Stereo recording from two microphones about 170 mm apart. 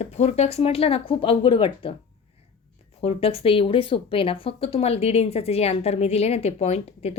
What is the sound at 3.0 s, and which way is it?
Speech, 35° left (ahead or behind).